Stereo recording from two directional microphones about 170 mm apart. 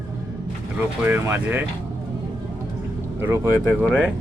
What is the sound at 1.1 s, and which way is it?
Speech, 10° right (ahead or behind).